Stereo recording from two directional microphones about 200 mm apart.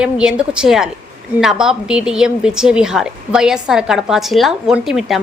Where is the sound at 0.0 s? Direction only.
5° right (ahead or behind).